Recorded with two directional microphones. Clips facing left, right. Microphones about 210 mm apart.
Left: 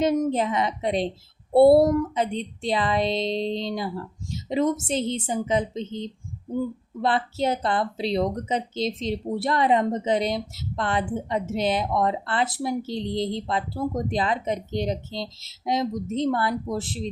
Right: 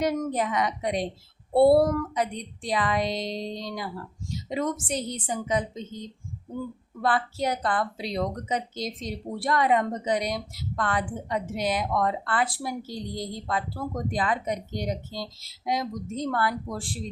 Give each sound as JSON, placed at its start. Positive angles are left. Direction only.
{"t": 0.0, "sound": "speech", "side_deg": 25}